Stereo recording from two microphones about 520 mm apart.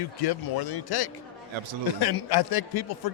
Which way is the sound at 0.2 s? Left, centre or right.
Left.